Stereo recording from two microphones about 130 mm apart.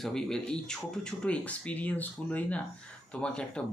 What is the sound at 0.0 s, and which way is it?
Speech, 5° left (ahead or behind).